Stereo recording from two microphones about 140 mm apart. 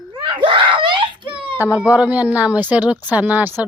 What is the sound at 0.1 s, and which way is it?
Screaming, 35° right (ahead or behind).